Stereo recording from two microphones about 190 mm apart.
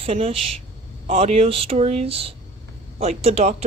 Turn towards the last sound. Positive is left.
turn(degrees=-35)  # may be behind; listen again after turning